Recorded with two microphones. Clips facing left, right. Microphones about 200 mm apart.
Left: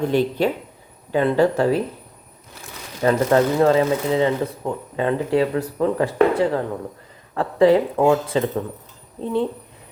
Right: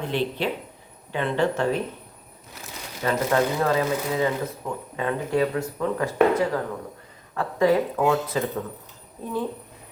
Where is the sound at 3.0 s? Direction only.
35° left (ahead or behind).